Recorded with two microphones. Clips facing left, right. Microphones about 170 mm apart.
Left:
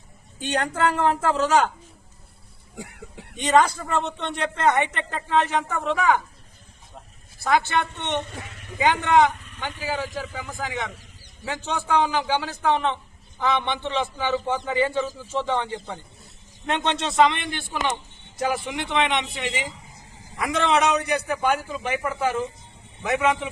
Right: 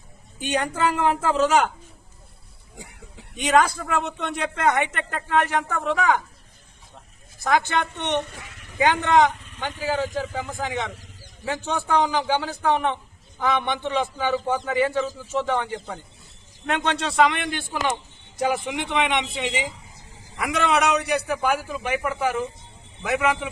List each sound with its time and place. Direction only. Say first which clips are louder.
0.3 s a man's voice: even; 10° right (ahead or behind)
3.3 s a man's voice: even; 10° right (ahead or behind)
5.6 s speech: even; 15° left (ahead or behind)
5.9 s a man's voice: even; 15° right (ahead or behind)
7.3 s a man's voice: even; 15° right (ahead or behind)
8.8 s speech: even; 15° left (ahead or behind)
10.2 s a man's voice: right 4 dB; 20° right (ahead or behind); by 15.4 s 5° right (ahead or behind)
16.7 s a man's voice: left 1 dB; 5° right (ahead or behind)
18.4 s a man's voice: right 2 dB; 20° right (ahead or behind)